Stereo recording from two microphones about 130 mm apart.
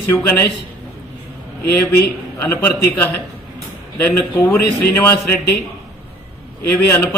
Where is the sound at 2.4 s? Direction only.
15° left (ahead or behind).